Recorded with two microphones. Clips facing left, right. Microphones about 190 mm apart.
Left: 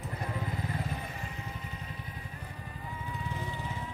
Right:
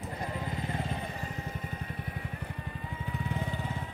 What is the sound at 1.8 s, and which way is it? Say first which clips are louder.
Vehicle: right 4 dB; 60° right (ahead or behind).